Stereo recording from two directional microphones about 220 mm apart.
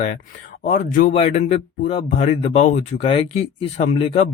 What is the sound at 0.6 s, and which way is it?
Speech, 40° left (ahead or behind).